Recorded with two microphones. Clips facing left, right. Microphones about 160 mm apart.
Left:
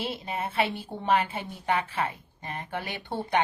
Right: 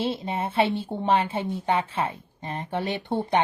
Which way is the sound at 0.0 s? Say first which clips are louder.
Right 5 dB; 25° right (ahead or behind).